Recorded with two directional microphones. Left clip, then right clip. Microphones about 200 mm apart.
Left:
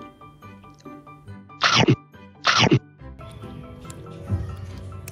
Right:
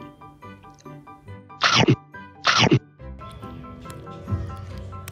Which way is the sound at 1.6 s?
Centre (ahead or behind).